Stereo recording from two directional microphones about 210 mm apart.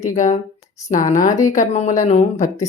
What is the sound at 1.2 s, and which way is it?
Speech, 15° left (ahead or behind).